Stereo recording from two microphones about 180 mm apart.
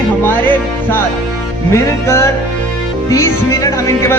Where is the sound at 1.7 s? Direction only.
15° left (ahead or behind).